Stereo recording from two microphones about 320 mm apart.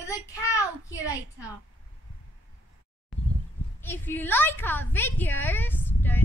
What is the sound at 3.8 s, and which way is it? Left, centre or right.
A woman's voice, centre.